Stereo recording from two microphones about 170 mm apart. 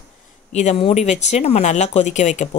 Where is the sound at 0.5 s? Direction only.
40° left (ahead or behind).